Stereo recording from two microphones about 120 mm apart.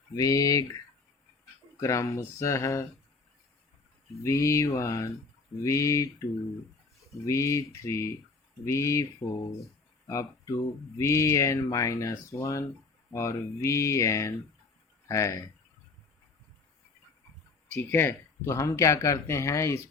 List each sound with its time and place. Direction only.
0.2 s speech: 30° left (ahead or behind)
1.8 s speech: 25° left (ahead or behind)
4.2 s speech: 25° left (ahead or behind)
10.1 s speech: 25° left (ahead or behind)
17.7 s speech: 20° left (ahead or behind)